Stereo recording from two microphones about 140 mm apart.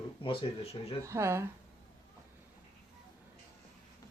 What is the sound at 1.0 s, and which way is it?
Speech, 20° right (ahead or behind).